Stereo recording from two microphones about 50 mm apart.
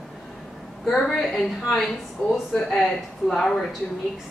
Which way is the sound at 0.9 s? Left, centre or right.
Centre.